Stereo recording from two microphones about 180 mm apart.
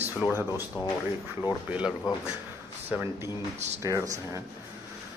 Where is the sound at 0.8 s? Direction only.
25° left (ahead or behind).